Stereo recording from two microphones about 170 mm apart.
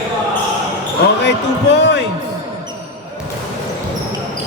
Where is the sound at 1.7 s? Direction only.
90° left.